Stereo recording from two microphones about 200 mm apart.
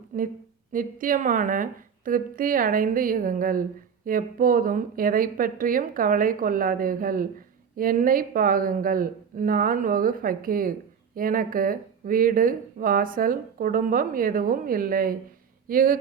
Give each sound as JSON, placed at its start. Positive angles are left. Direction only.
{"t": 0.1, "sound": "a woman's voice", "side_deg": -40}